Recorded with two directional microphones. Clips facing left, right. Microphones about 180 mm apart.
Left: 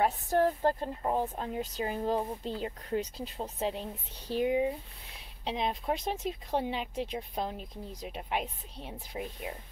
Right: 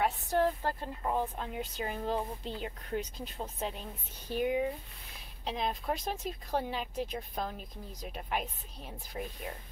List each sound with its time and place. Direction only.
0.0 s a woman's voice: 40° left (ahead or behind)
3.3 s speech: 25° left (ahead or behind)
9.5 s speech: 15° left (ahead or behind)